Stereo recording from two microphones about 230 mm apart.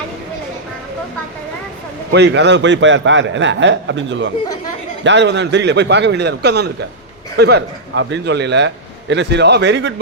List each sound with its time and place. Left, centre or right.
2.1 s a man's voice: right